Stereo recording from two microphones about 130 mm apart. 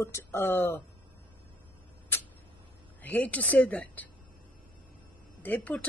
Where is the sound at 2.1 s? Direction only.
15° left (ahead or behind).